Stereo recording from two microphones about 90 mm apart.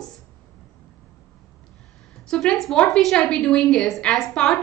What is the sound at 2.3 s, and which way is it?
A woman's voice, 5° left (ahead or behind).